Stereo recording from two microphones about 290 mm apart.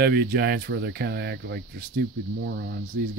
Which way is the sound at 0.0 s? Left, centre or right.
Right.